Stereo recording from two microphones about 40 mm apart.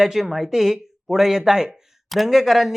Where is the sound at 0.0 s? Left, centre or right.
Centre.